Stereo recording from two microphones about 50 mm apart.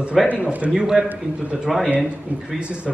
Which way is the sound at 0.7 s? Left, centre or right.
Centre.